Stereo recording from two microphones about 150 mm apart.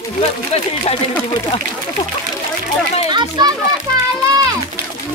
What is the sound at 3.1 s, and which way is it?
Speech, 25° right (ahead or behind).